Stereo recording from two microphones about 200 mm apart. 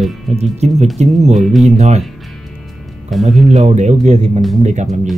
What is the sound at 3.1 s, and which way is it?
Speech, centre (ahead or behind).